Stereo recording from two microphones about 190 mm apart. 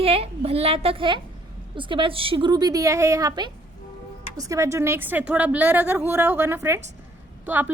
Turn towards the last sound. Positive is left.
turn(degrees=-10)  # may be behind; listen again after turning